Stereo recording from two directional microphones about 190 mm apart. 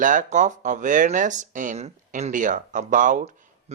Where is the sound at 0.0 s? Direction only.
45° right (ahead or behind).